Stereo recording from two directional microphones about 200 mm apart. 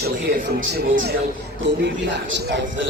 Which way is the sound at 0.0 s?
55° right (ahead or behind).